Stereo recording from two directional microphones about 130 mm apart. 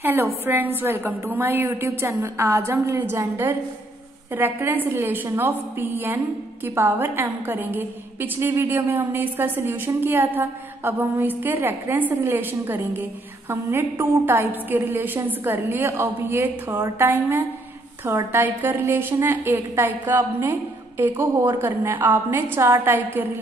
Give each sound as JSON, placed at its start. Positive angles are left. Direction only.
{"t": 0.0, "sound": "a woman's voice", "side_deg": -15}